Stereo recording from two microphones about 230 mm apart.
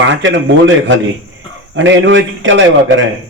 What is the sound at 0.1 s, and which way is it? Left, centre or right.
A man's voice, right.